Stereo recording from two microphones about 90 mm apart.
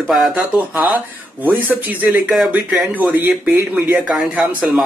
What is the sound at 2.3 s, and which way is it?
Speech, 5° right (ahead or behind).